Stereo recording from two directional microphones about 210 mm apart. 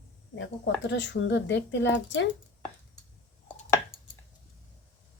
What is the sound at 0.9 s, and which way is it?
Speech, 60° left (ahead or behind).